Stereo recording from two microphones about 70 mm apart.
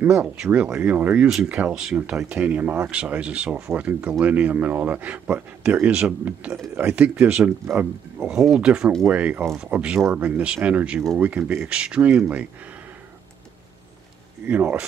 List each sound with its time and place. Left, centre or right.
0.5 s speech: right
7.6 s speech: right
8.2 s speech: centre
9.9 s speech: right
10.2 s speech: centre